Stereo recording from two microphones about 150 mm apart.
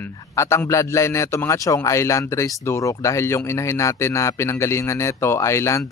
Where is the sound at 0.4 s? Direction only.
20° left (ahead or behind).